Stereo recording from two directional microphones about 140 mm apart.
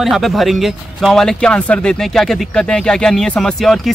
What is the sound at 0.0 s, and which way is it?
Speech, centre (ahead or behind).